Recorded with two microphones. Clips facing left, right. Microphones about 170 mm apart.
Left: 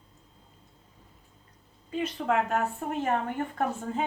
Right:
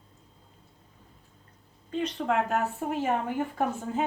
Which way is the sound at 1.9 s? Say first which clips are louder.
Even; 5° left (ahead or behind).